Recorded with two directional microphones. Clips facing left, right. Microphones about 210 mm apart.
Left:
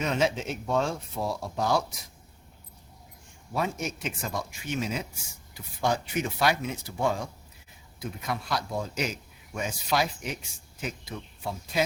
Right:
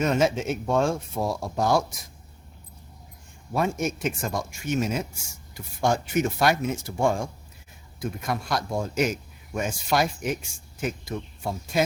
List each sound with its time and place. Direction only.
0.0 s speech: 45° right (ahead or behind)
3.5 s speech: 50° right (ahead or behind)